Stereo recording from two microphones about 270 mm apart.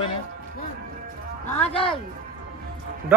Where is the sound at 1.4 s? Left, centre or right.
Left.